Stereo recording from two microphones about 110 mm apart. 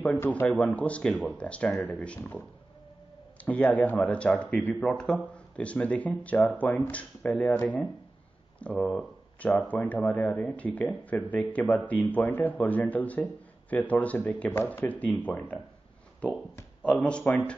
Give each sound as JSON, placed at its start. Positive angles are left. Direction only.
{"t": 0.0, "sound": "speech", "side_deg": 15}
{"t": 3.4, "sound": "speech", "side_deg": 15}
{"t": 16.8, "sound": "speech", "side_deg": 10}